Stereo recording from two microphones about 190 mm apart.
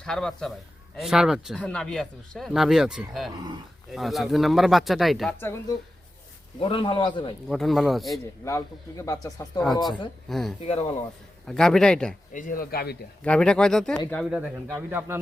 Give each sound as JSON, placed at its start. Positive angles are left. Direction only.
{"t": 0.0, "sound": "speech", "side_deg": 5}
{"t": 5.4, "sound": "speech", "side_deg": 15}
{"t": 6.6, "sound": "a man's voice", "side_deg": 25}
{"t": 7.4, "sound": "speech", "side_deg": 0}
{"t": 8.4, "sound": "speech", "side_deg": 15}
{"t": 10.2, "sound": "speech", "side_deg": 0}
{"t": 10.6, "sound": "speech", "side_deg": 30}
{"t": 11.4, "sound": "speech", "side_deg": 5}
{"t": 12.3, "sound": "speech", "side_deg": 45}
{"t": 13.2, "sound": "speech", "side_deg": 5}